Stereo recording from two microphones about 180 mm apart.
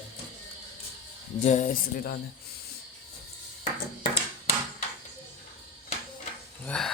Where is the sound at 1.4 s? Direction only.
40° left (ahead or behind).